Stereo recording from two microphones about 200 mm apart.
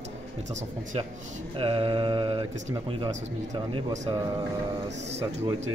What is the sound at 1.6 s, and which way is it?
Speech, 25° right (ahead or behind).